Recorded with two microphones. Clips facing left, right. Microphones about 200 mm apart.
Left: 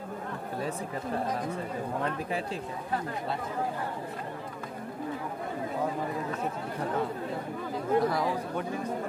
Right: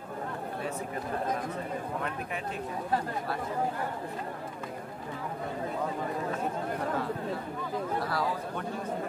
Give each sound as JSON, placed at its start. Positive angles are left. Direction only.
{"t": 7.9, "sound": "speech", "side_deg": 20}